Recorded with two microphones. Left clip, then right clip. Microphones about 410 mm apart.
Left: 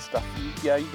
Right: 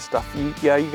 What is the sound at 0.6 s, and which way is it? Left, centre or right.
Speech, right.